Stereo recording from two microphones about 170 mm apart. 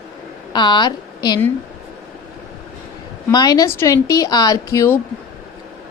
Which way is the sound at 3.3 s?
20° left (ahead or behind).